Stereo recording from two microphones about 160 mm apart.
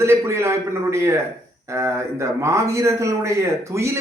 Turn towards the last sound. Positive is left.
turn(degrees=-20)  # may be behind; listen again after turning